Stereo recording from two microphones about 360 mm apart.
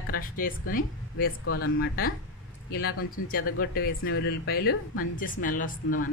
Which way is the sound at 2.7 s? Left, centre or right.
Left.